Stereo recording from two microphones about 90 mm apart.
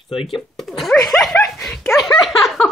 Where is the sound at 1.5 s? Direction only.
5° left (ahead or behind).